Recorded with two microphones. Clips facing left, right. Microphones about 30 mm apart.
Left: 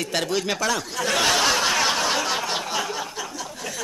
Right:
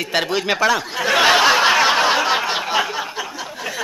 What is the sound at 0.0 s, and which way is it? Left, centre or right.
Chuckle, right.